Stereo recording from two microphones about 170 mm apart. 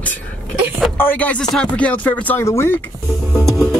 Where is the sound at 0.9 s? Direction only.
10° left (ahead or behind).